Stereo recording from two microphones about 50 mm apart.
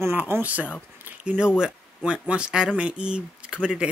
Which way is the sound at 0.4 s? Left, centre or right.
Right.